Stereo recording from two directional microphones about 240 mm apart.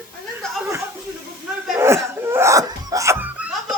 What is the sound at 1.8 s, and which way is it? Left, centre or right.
Laughter, centre.